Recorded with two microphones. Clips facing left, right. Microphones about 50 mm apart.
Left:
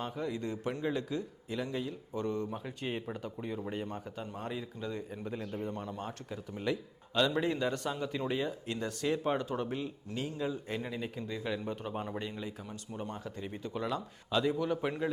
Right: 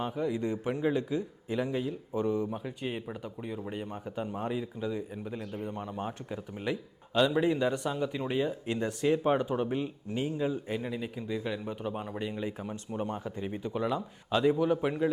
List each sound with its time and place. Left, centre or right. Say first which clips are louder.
0.0 s speech: right 5 dB; centre
2.6 s speech: right 2 dB; centre
5.6 s speech: right 3 dB; centre
10.8 s speech: right 2 dB; centre